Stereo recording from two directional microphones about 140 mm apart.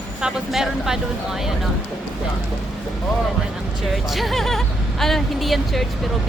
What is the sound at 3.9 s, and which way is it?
Speech, centre (ahead or behind).